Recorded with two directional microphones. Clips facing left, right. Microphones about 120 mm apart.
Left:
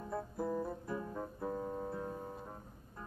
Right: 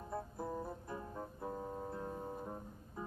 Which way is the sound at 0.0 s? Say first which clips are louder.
Left 4 dB; 25° right (ahead or behind).